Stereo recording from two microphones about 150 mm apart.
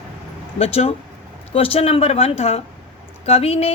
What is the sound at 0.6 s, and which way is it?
Speech, 40° left (ahead or behind).